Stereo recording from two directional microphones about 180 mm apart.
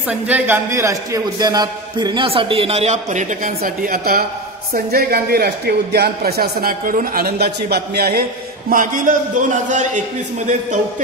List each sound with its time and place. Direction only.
0.1 s a man's voice: 10° right (ahead or behind); by 10.8 s 40° right (ahead or behind)